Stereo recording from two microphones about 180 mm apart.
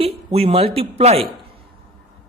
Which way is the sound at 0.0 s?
35° right (ahead or behind).